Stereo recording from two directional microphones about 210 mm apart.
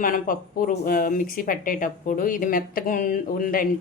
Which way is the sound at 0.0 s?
40° left (ahead or behind).